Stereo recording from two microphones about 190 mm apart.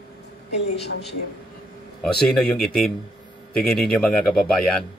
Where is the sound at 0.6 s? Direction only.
65° left (ahead or behind).